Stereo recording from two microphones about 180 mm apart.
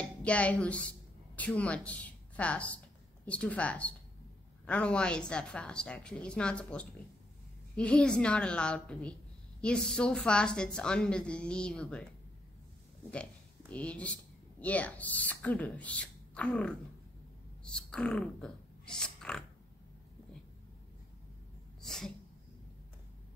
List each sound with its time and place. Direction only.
0.0 s a woman's voice: 5° left (ahead or behind)
13.1 s speech: 5° left (ahead or behind)
21.8 s a sound: centre (ahead or behind)